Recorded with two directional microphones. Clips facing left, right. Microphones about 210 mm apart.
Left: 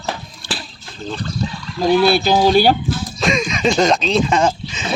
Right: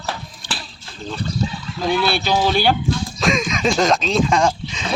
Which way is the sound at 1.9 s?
40° left (ahead or behind).